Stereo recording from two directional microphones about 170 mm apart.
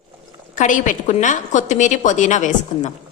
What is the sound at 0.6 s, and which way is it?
A woman's voice, 50° left (ahead or behind).